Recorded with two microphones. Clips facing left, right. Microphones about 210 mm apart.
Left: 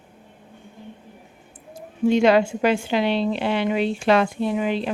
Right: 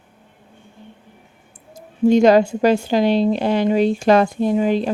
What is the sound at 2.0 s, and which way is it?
A woman's voice, 40° right (ahead or behind).